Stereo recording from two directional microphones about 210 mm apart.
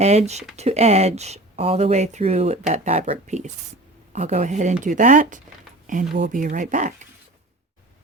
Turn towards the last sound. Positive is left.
turn(degrees=-35)  # may be behind; listen again after turning